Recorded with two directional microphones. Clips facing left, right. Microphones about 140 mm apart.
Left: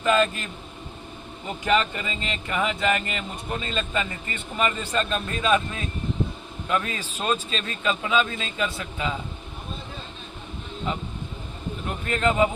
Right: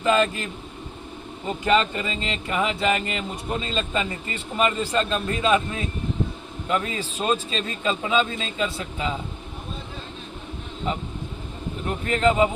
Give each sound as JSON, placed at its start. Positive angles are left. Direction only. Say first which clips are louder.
{"t": 0.0, "sound": "speech", "louder": "right 1 dB", "side_deg": -25}
{"t": 1.6, "sound": "speech", "louder": "right 2 dB", "side_deg": -30}
{"t": 12.1, "sound": "speech", "louder": "right 2 dB", "side_deg": -25}